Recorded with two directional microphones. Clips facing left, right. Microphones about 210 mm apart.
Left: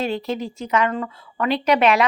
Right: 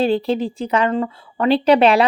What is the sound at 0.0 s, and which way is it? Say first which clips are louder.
A woman's voice: right 6 dB; 30° right (ahead or behind).